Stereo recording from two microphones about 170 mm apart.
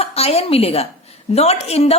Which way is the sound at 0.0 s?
35° left (ahead or behind).